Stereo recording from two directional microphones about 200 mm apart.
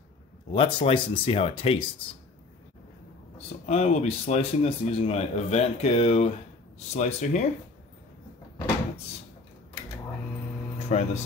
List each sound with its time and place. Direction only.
0.5 s speech: 25° left (ahead or behind)
3.3 s speech: 30° left (ahead or behind)
10.9 s speech: 35° left (ahead or behind)